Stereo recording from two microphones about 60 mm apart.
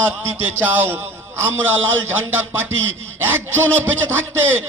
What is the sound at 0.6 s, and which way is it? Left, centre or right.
A man's voice, right.